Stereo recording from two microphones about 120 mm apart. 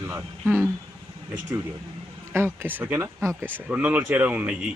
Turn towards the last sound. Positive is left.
turn(degrees=-15)  # may be behind; listen again after turning